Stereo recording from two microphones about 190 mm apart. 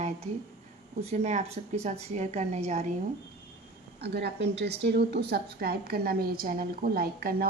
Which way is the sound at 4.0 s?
60° right (ahead or behind).